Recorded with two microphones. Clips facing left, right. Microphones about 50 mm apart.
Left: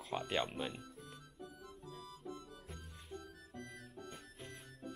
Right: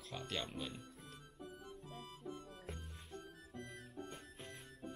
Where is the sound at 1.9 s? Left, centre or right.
Left.